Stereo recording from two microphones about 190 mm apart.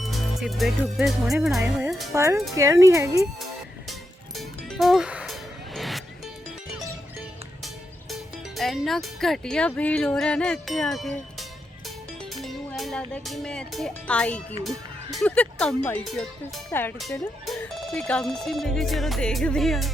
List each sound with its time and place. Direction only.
0.0 s speech: centre (ahead or behind)
2.1 s speech: 15° right (ahead or behind)
4.4 s music: centre (ahead or behind)
8.1 s speech: centre (ahead or behind)
12.4 s speech: centre (ahead or behind)
17.0 s speech: centre (ahead or behind)